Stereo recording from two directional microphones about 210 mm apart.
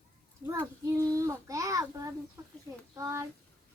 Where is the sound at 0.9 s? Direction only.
15° right (ahead or behind).